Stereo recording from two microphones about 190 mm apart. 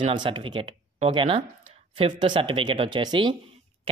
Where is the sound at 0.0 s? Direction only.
25° right (ahead or behind).